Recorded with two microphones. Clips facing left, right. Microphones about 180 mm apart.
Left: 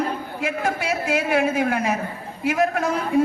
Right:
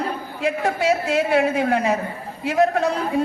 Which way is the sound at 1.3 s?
30° right (ahead or behind).